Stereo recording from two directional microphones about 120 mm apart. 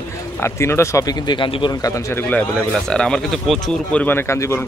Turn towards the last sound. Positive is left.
turn(degrees=25)  # may be behind; listen again after turning